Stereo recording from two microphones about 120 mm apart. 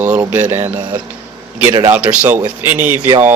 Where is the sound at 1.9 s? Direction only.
10° right (ahead or behind).